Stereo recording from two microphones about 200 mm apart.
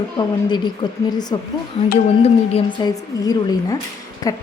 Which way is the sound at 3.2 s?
20° left (ahead or behind).